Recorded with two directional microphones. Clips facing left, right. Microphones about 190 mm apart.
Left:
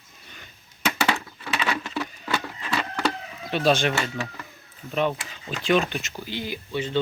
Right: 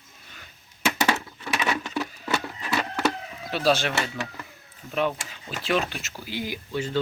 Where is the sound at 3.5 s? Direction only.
5° right (ahead or behind).